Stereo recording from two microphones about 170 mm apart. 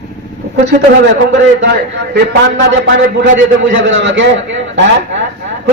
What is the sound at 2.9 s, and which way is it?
A man's voice, 90° right.